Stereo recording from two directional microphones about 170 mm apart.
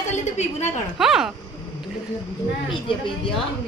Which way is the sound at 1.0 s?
Centre (ahead or behind).